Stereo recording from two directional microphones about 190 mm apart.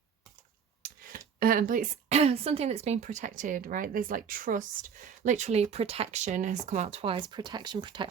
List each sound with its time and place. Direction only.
1.4 s a woman's voice: 50° right (ahead or behind); by 8.0 s 25° right (ahead or behind)